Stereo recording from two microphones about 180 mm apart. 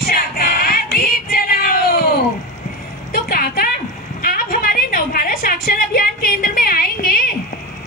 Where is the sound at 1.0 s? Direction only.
55° left (ahead or behind).